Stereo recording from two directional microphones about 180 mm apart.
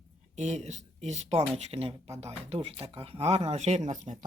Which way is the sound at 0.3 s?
40° right (ahead or behind).